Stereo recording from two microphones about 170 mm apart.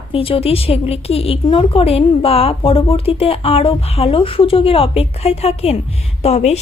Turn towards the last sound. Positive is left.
turn(degrees=40)  # may be behind; listen again after turning